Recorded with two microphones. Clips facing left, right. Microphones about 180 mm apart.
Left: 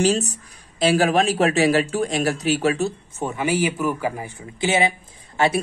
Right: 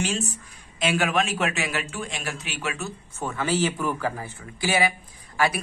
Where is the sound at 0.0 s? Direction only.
40° left (ahead or behind).